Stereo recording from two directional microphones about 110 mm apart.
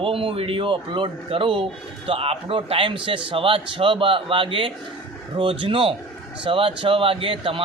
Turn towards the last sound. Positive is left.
turn(degrees=-50)  # may be behind; listen again after turning